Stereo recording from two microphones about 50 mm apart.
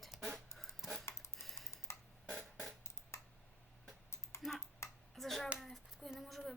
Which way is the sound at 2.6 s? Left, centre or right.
Left.